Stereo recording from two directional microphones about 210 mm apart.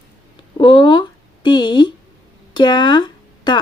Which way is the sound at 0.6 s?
20° left (ahead or behind).